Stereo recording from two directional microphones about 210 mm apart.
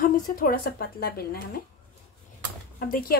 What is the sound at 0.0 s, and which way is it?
Speech, 40° left (ahead or behind).